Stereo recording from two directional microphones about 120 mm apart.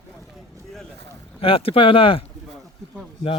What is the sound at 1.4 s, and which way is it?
Speech, 50° left (ahead or behind).